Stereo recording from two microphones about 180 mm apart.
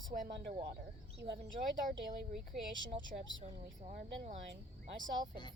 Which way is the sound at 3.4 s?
40° right (ahead or behind).